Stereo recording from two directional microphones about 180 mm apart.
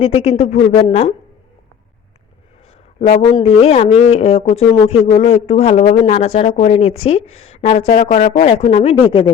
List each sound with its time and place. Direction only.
0.0 s speech: 35° left (ahead or behind)
3.0 s speech: 35° left (ahead or behind)
7.8 s speech: 50° left (ahead or behind); by 9.3 s 30° left (ahead or behind)